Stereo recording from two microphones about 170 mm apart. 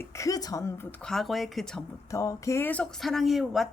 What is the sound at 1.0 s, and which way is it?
Speech, centre (ahead or behind).